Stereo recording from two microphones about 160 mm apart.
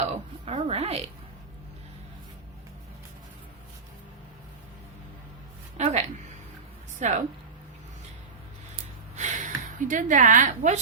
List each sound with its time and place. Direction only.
0.0 s a woman's voice: 40° right (ahead or behind)
5.7 s a woman's voice: 45° right (ahead or behind)
8.7 s a sound: 50° right (ahead or behind)